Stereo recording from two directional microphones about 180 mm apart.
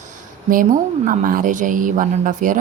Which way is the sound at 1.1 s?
50° right (ahead or behind).